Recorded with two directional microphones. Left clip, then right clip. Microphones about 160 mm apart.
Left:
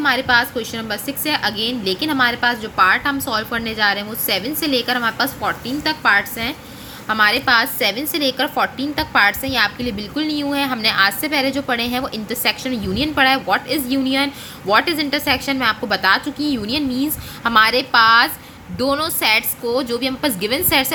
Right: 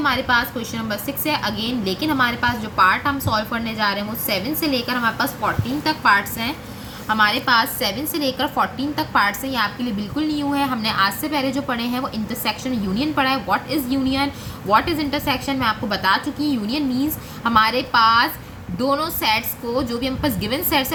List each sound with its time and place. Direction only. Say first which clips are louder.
0.0 s a woman's voice: left 3 dB; 40° left (ahead or behind)